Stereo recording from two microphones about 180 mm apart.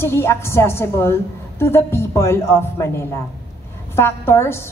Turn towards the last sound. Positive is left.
turn(degrees=15)  # may be behind; listen again after turning